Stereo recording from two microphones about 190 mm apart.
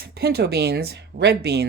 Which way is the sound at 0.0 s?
55° right (ahead or behind).